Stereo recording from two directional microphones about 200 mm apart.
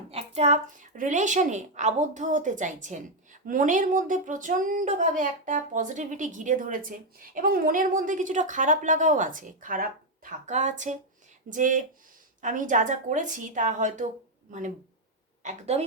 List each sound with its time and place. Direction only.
0.1 s speech: 30° right (ahead or behind)
15.4 s speech: 30° right (ahead or behind)